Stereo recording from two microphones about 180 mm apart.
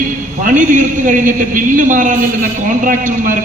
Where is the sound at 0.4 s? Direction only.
45° right (ahead or behind).